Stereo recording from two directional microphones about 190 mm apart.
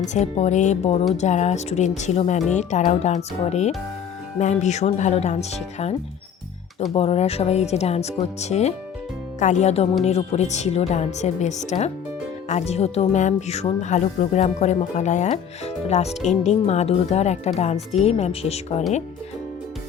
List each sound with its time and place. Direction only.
0.1 s speech: 35° left (ahead or behind)
6.9 s speech: 30° left (ahead or behind)